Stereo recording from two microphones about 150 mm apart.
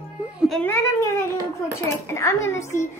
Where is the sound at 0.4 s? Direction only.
Centre (ahead or behind).